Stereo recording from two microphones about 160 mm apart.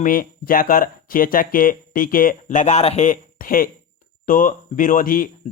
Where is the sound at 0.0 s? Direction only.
60° left (ahead or behind).